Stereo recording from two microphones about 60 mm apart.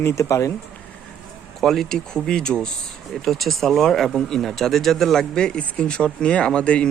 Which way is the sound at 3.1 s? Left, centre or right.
Centre.